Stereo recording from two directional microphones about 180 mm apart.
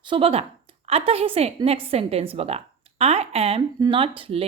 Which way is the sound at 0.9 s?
30° right (ahead or behind).